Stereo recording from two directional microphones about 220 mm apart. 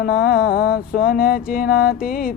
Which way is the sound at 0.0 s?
45° left (ahead or behind).